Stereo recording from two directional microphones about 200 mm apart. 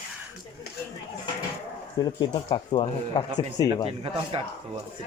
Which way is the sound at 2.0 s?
20° left (ahead or behind).